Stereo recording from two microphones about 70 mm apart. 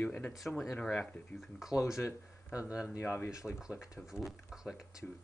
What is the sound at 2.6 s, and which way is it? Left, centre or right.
Speech, centre.